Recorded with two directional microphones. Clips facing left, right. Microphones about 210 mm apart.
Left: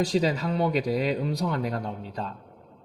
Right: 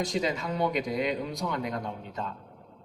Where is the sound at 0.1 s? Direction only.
35° left (ahead or behind).